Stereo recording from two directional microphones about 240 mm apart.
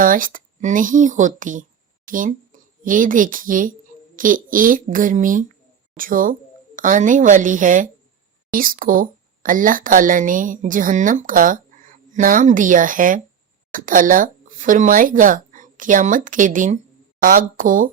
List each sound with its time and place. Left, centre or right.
0.0 s speech: right